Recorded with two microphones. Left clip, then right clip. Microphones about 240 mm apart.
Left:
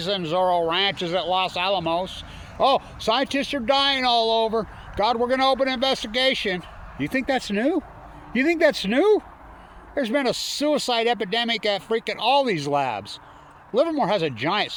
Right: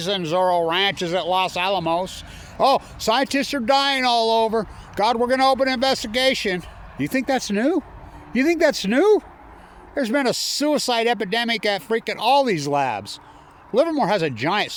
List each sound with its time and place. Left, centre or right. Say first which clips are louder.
0.0 s speech: right 2 dB; right